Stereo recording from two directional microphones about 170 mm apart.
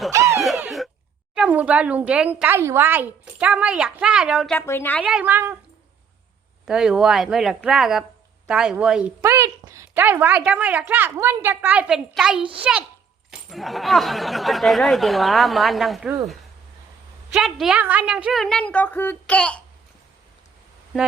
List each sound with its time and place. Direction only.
0.1 s a sound: 15° right (ahead or behind)
1.4 s speech: 10° right (ahead or behind)
4.5 s a woman's voice: 15° left (ahead or behind)
5.0 s speech: 5° right (ahead or behind)
6.7 s speech: 5° right (ahead or behind)
9.4 s speech: 20° right (ahead or behind)
13.5 s speech: centre (ahead or behind)
17.3 s speech: centre (ahead or behind)